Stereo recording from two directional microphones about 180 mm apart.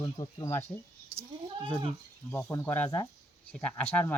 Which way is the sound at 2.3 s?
10° left (ahead or behind).